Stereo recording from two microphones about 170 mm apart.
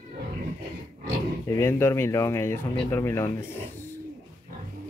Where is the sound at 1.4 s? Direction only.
15° left (ahead or behind).